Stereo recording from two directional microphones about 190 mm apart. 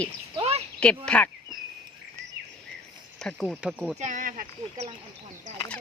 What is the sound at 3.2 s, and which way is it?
Speech, centre (ahead or behind).